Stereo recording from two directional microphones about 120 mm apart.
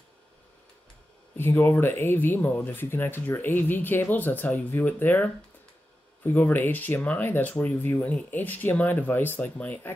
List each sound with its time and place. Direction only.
1.3 s speech: 20° left (ahead or behind)